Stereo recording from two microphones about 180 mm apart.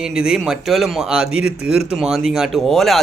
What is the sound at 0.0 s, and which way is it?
Speech, 5° right (ahead or behind).